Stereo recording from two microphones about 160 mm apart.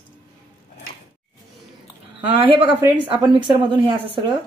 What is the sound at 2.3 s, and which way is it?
Speech, 35° right (ahead or behind).